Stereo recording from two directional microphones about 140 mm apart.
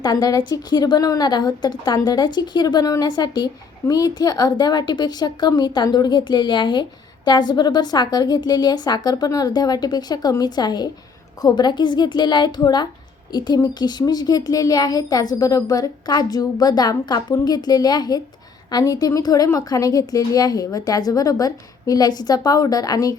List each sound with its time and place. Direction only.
0.0 s a woman's voice: 30° left (ahead or behind)